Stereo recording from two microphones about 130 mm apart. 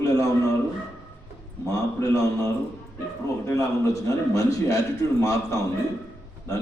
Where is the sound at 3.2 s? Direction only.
25° left (ahead or behind).